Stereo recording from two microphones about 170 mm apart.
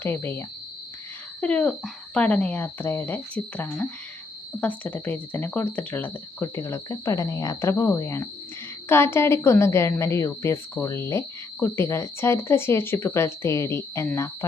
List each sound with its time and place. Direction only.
0.0 s a woman's voice: 15° left (ahead or behind)